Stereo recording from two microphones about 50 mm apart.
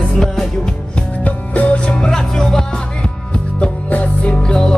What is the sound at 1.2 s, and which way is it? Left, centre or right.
Music, left.